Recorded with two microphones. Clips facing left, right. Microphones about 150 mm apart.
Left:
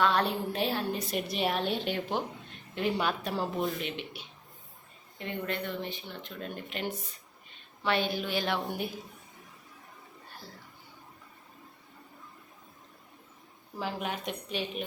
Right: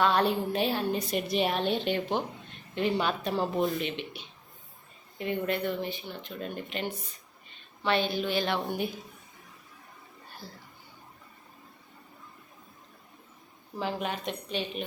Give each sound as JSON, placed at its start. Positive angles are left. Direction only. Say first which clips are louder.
{"t": 0.0, "sound": "a woman's voice", "louder": "right 2 dB", "side_deg": 0}
{"t": 5.1, "sound": "a woman's voice", "louder": "right 5 dB", "side_deg": -10}
{"t": 13.7, "sound": "speech", "louder": "right 2 dB", "side_deg": 5}